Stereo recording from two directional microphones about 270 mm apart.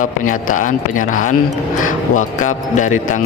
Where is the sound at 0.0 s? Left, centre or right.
Left.